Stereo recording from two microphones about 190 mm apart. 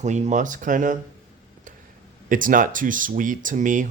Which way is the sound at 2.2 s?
45° right (ahead or behind).